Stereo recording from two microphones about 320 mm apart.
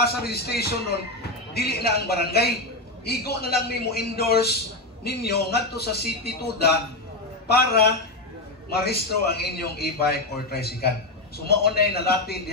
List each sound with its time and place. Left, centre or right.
0.0 s a man's voice: left